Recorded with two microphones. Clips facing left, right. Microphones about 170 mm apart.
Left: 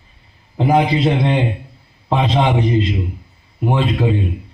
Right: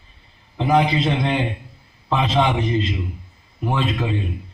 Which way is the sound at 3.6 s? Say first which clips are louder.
Left 5 dB; 30° left (ahead or behind).